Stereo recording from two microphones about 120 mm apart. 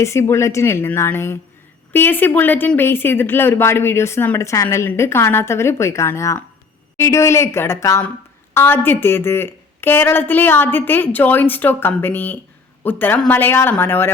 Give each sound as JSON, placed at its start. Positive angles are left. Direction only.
{"t": 0.0, "sound": "a woman's voice", "side_deg": 25}